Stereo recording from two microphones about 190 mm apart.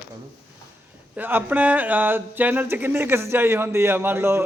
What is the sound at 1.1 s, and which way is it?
Speech, 10° right (ahead or behind).